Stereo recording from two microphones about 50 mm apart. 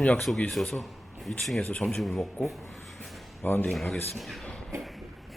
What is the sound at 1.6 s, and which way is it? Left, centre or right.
Speech, left.